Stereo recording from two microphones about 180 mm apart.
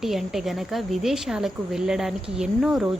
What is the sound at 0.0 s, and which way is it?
A woman's voice, centre (ahead or behind).